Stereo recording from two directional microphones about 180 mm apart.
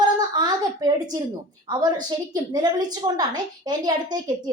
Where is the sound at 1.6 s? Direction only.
25° right (ahead or behind).